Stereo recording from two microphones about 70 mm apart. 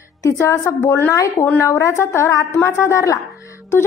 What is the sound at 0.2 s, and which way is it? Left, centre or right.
A woman's voice, left.